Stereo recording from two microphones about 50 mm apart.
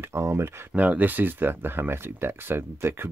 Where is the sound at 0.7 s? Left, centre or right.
Right.